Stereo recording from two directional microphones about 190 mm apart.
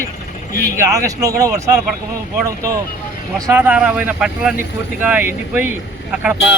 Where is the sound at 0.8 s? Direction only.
15° right (ahead or behind).